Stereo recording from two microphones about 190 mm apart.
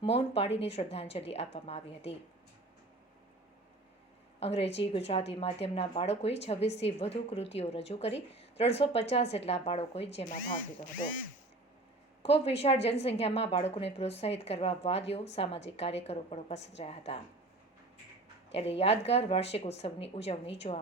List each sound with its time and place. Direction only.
0.0 s a woman's voice: 30° left (ahead or behind)
4.4 s a woman's voice: 35° left (ahead or behind)
10.3 s speech: 45° left (ahead or behind)
12.2 s a woman's voice: 30° left (ahead or behind)
18.5 s a woman's voice: 30° left (ahead or behind)